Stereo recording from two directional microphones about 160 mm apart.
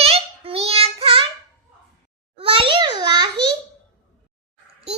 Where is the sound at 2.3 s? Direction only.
35° right (ahead or behind).